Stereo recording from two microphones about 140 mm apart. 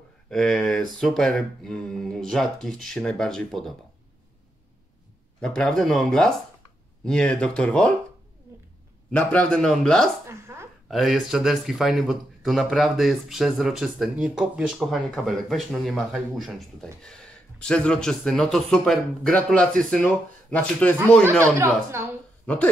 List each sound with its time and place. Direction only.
0.3 s speech: 5° left (ahead or behind)
5.4 s speech: 5° left (ahead or behind)
9.1 s speech: 10° left (ahead or behind)
10.2 s a sound: 20° right (ahead or behind)
10.9 s speech: centre (ahead or behind)